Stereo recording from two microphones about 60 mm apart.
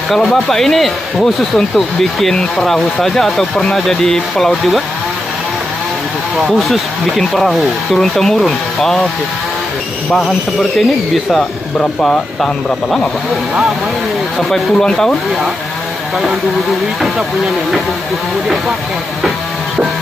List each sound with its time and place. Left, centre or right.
0.1 s speech: centre
6.3 s speech: centre
10.1 s speech: centre
11.8 s speech: centre
14.5 s speech: centre